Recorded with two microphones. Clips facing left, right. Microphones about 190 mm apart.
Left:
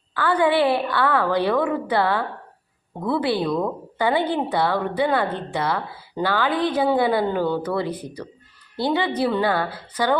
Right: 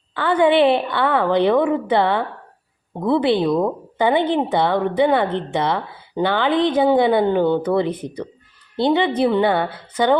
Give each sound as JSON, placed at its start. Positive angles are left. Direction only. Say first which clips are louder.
{"t": 0.1, "sound": "a woman's voice", "louder": "right 4 dB", "side_deg": -25}